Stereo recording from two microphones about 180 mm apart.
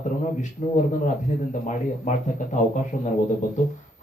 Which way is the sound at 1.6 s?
45° left (ahead or behind).